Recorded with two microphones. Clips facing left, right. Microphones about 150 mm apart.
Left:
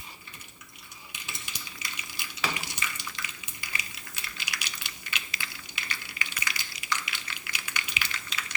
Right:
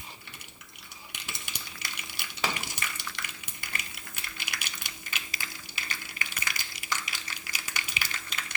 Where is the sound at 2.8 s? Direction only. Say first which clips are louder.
Even; 55° right (ahead or behind).